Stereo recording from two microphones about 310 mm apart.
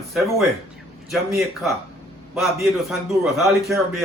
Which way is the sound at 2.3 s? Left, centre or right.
Centre.